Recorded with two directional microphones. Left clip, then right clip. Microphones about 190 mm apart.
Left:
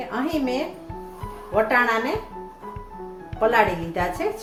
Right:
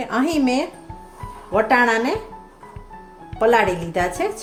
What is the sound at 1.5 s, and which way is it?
Speech, 65° right (ahead or behind).